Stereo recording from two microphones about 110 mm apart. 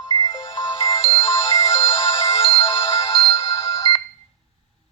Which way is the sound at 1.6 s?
70° left (ahead or behind).